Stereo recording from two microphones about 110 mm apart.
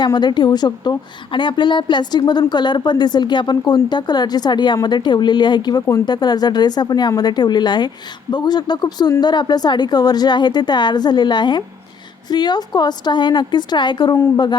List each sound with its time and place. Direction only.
0.0 s a woman's voice: 40° left (ahead or behind)